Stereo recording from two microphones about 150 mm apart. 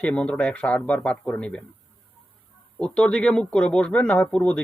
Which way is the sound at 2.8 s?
5° left (ahead or behind).